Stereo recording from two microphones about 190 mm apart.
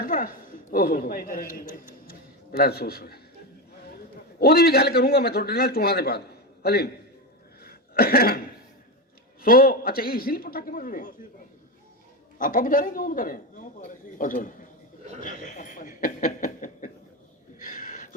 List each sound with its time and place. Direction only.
0.0 s a man's voice: 45° left (ahead or behind)
4.4 s a man's voice: 55° left (ahead or behind)
7.6 s cough: 55° left (ahead or behind)
9.4 s a man's voice: 50° left (ahead or behind)
12.4 s a man's voice: 45° left (ahead or behind)
17.6 s a sound: 45° left (ahead or behind)